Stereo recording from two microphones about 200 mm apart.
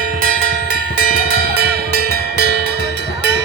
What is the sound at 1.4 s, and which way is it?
Music, 50° right (ahead or behind).